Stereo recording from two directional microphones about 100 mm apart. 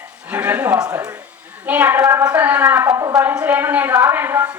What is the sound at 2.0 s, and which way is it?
Speech, 35° right (ahead or behind).